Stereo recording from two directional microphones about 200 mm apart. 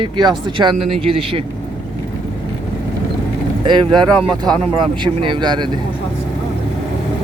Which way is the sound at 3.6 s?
25° right (ahead or behind).